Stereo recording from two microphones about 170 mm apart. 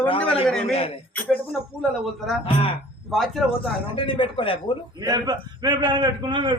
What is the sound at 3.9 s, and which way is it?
Speech, 30° left (ahead or behind).